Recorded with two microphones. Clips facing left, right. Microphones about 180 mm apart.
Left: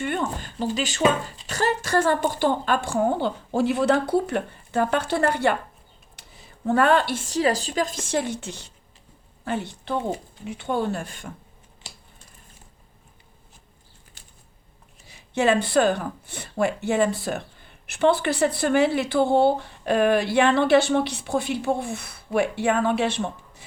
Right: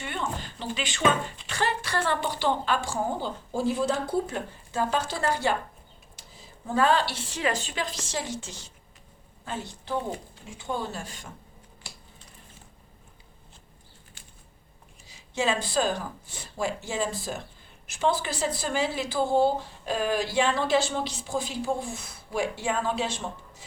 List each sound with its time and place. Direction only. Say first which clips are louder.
0.0 s a woman's voice: left 6 dB; 50° left (ahead or behind)
11.9 s a sound: left 1 dB; 25° left (ahead or behind)
15.0 s a woman's voice: left 6 dB; 60° left (ahead or behind)